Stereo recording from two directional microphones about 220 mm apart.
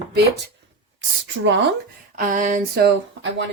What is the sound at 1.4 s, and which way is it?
Speech, 50° right (ahead or behind).